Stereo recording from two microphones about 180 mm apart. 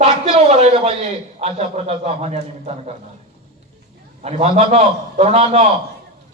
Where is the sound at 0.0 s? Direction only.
35° right (ahead or behind).